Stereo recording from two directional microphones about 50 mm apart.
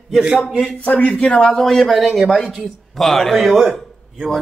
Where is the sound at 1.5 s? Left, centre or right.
Centre.